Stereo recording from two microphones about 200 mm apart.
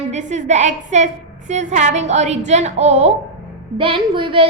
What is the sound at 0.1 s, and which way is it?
A woman's voice, 35° right (ahead or behind).